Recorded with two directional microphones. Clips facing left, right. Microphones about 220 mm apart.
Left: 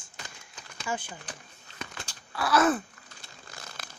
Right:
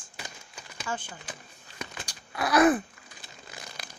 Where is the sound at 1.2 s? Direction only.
10° right (ahead or behind).